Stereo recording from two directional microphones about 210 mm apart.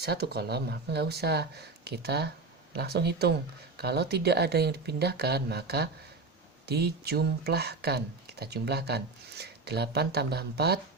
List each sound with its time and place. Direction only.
0.0 s speech: 50° right (ahead or behind)